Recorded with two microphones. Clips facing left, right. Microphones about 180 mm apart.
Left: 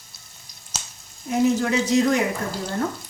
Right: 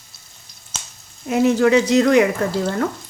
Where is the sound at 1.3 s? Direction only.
75° right (ahead or behind).